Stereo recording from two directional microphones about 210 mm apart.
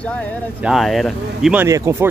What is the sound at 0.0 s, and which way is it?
Speech, 5° left (ahead or behind).